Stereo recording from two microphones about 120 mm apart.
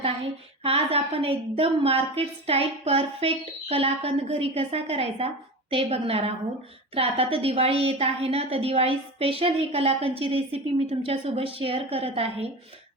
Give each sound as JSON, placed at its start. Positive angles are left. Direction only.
{"t": 0.6, "sound": "a woman's voice", "side_deg": -55}